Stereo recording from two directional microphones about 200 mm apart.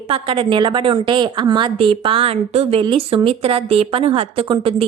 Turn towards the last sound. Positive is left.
turn(degrees=-25)  # may be behind; listen again after turning